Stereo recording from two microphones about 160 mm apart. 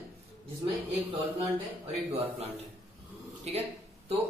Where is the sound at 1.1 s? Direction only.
35° right (ahead or behind).